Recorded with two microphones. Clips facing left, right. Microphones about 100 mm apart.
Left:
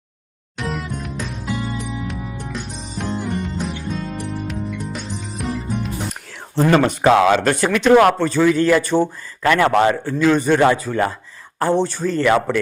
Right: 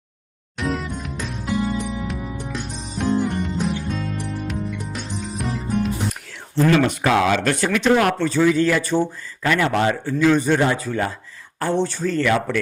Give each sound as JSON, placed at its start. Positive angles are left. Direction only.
{"t": 0.5, "sound": "music", "side_deg": 0}
{"t": 6.7, "sound": "speech", "side_deg": 45}
{"t": 7.0, "sound": "speech", "side_deg": 30}
{"t": 7.6, "sound": "speech", "side_deg": 55}
{"t": 7.9, "sound": "speech", "side_deg": 40}
{"t": 8.3, "sound": "speech", "side_deg": 60}
{"t": 10.8, "sound": "speech", "side_deg": 50}
{"t": 11.6, "sound": "speech", "side_deg": 35}